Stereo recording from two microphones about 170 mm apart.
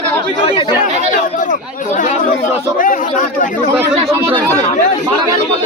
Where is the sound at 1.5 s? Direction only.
50° left (ahead or behind).